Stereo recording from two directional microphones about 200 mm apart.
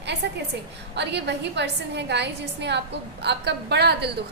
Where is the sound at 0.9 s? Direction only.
60° right (ahead or behind).